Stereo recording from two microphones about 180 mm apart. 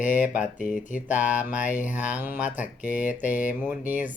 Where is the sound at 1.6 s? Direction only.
45° left (ahead or behind).